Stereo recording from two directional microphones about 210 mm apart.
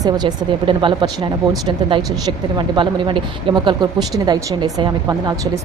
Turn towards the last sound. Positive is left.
turn(degrees=-20)  # may be behind; listen again after turning